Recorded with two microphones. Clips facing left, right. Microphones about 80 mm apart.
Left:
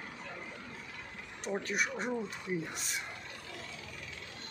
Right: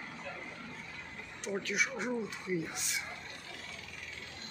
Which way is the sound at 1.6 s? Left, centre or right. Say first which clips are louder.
Even; left.